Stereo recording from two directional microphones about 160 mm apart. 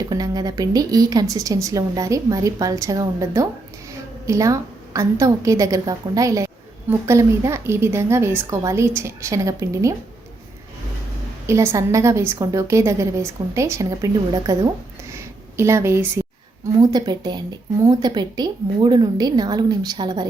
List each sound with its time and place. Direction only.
0.1 s a woman's voice: 25° right (ahead or behind)
11.4 s a woman's voice: 15° right (ahead or behind)
16.9 s a woman's voice: 25° right (ahead or behind)